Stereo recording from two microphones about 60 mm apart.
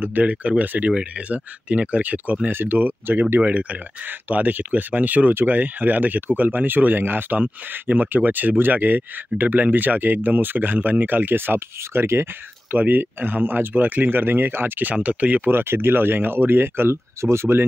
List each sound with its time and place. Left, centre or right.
0.0 s speech: right
3.3 s speech: right
12.7 s speech: right
15.5 s speech: right